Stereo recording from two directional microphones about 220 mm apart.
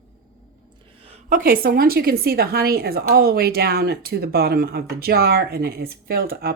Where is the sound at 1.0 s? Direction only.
35° right (ahead or behind).